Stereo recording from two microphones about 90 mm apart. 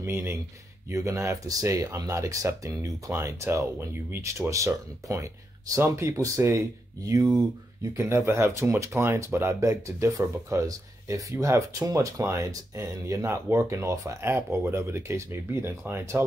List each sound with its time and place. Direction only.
0.0 s speech: 25° right (ahead or behind)